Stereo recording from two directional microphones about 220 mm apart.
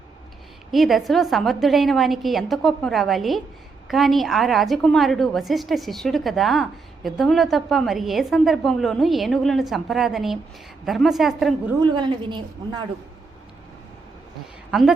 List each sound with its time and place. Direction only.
0.7 s a woman's voice: centre (ahead or behind)
11.8 s a woman's voice: 20° right (ahead or behind)
14.7 s a woman's voice: centre (ahead or behind)